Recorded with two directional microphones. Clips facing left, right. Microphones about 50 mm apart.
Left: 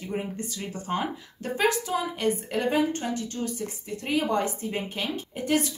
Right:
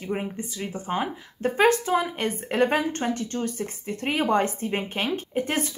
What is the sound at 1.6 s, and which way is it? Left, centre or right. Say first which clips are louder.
A woman's voice: right 5 dB; right.